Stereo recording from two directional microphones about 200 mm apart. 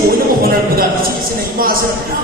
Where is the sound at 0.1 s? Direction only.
50° right (ahead or behind).